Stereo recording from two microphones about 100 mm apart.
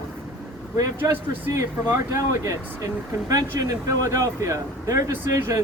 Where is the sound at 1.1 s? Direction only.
25° right (ahead or behind).